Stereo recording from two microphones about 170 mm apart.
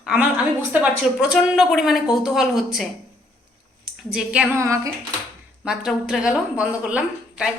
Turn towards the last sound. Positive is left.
turn(degrees=-5)  # may be behind; listen again after turning